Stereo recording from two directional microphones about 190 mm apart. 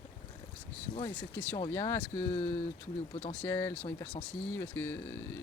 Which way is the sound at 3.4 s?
10° left (ahead or behind).